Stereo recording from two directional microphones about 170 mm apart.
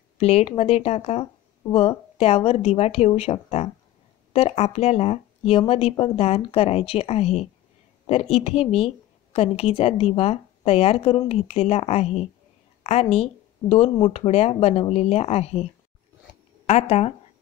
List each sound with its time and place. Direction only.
0.2 s speech: 35° left (ahead or behind)
16.6 s speech: 40° left (ahead or behind)